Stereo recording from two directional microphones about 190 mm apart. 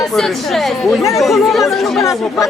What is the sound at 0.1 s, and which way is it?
Speech, centre (ahead or behind).